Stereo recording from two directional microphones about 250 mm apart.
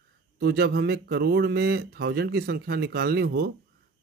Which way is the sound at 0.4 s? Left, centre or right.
Right.